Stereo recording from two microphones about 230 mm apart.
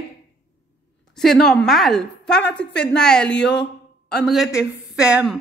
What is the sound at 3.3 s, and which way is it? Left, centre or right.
Speech, left.